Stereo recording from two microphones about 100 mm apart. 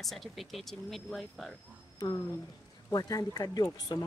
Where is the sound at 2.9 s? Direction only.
35° left (ahead or behind).